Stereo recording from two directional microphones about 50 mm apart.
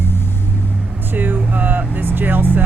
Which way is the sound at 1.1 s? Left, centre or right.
Right.